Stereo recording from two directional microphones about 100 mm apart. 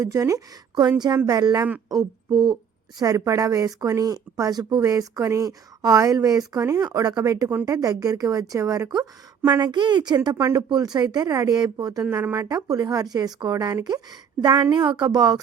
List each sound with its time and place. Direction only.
0.0 s speech: 35° right (ahead or behind)
3.0 s speech: 35° right (ahead or behind)
9.5 s speech: 45° right (ahead or behind)
12.0 s speech: 20° right (ahead or behind)
12.4 s speech: 35° right (ahead or behind)